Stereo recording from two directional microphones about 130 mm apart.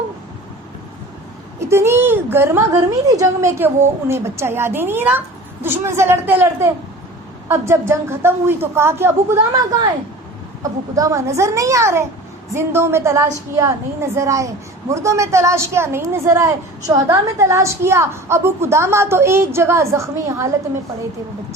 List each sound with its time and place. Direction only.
1.5 s a woman's voice: 20° right (ahead or behind)
10.6 s a woman's voice: 25° right (ahead or behind)